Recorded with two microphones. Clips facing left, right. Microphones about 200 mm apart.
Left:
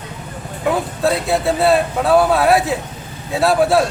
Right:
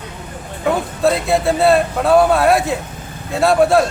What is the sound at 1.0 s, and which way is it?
A man's voice, centre (ahead or behind).